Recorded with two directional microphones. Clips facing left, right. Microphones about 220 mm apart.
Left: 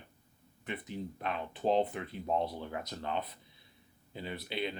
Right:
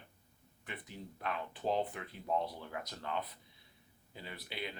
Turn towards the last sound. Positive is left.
turn(degrees=25)  # may be behind; listen again after turning